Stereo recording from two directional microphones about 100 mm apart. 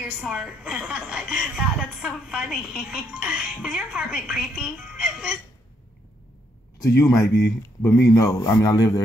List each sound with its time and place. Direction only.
0.0 s a woman's voice: 5° right (ahead or behind)
6.8 s a man's voice: 30° left (ahead or behind)